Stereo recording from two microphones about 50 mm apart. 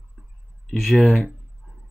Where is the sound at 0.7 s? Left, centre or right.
Centre.